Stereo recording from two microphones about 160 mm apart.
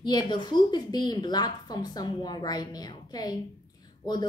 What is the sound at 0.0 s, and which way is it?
A woman's voice, 25° left (ahead or behind).